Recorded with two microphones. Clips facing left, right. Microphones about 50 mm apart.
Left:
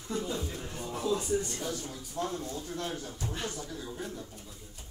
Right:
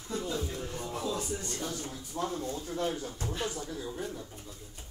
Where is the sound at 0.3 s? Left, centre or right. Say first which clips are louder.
Right 1 dB; centre.